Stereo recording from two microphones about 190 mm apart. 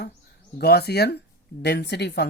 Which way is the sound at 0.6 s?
55° left (ahead or behind).